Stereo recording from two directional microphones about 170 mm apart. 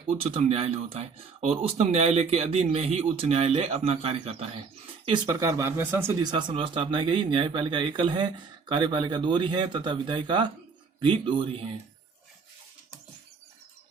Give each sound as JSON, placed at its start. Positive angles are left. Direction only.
{"t": 0.1, "sound": "speech", "side_deg": -35}
{"t": 5.0, "sound": "speech", "side_deg": -25}
{"t": 6.3, "sound": "speech", "side_deg": -30}